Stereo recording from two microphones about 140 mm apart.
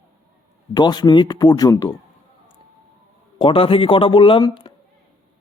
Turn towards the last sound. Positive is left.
turn(degrees=30)  # may be behind; listen again after turning